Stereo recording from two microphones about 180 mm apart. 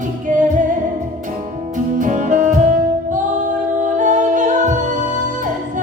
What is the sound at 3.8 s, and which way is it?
Music, 45° right (ahead or behind).